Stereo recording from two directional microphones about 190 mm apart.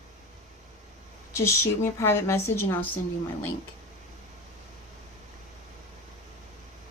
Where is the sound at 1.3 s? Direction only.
15° left (ahead or behind).